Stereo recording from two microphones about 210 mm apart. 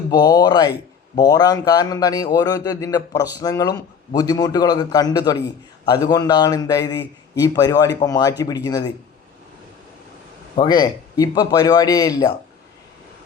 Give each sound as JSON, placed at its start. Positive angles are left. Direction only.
{"t": 0.1, "sound": "a man's voice", "side_deg": 20}
{"t": 10.5, "sound": "a man's voice", "side_deg": 20}